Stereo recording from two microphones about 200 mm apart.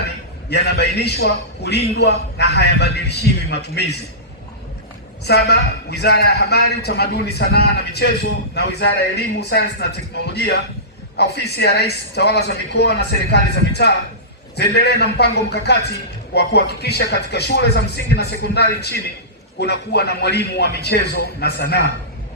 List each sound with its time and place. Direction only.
0.5 s a man's voice: 55° left (ahead or behind)
5.2 s a man's voice: 55° left (ahead or behind)